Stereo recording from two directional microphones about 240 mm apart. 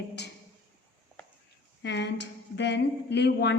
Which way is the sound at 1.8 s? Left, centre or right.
Left.